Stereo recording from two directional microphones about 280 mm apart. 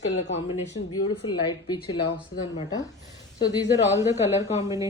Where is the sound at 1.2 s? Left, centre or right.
Centre.